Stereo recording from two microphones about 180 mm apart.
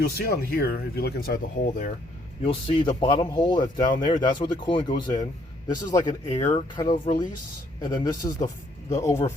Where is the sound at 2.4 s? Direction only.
25° left (ahead or behind).